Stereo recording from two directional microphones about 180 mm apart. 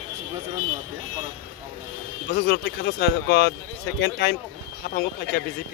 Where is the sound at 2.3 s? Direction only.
60° left (ahead or behind).